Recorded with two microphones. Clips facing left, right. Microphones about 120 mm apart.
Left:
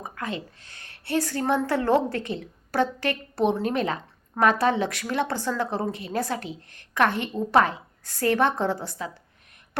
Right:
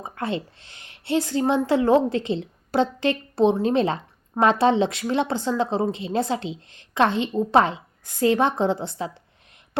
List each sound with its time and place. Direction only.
0.0 s a woman's voice: 30° right (ahead or behind)